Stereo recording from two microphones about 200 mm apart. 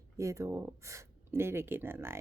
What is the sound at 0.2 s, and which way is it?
Speech, 15° right (ahead or behind).